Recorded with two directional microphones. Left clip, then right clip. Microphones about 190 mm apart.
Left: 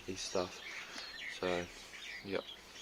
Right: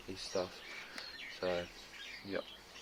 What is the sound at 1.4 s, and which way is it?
Speech, 55° left (ahead or behind).